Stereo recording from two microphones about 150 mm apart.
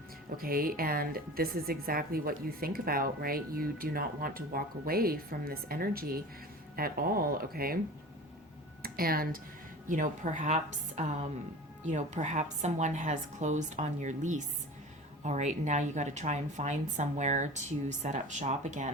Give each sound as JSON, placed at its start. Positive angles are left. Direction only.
{"t": 0.3, "sound": "a woman's voice", "side_deg": -75}
{"t": 8.8, "sound": "speech", "side_deg": -80}
{"t": 9.9, "sound": "a woman's voice", "side_deg": -60}